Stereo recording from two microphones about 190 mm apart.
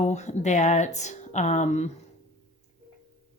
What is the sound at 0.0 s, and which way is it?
Speech, 35° left (ahead or behind).